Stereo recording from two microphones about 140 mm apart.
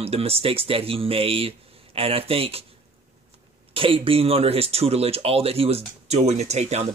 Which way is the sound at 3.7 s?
40° right (ahead or behind).